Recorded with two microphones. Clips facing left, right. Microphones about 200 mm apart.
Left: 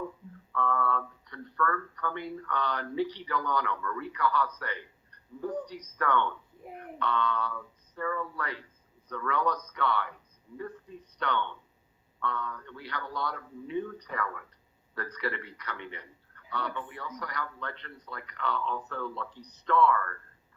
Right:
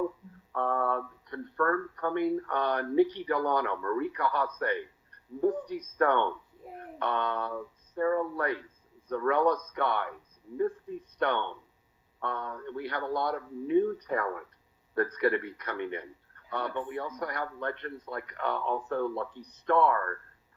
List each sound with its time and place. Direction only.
0.5 s speech: 50° right (ahead or behind)
11.2 s speech: 55° right (ahead or behind)